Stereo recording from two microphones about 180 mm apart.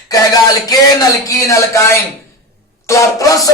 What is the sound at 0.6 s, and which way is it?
Speech, 20° left (ahead or behind).